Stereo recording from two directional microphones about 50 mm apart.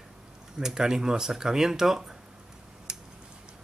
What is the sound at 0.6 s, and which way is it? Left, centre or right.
Speech, centre.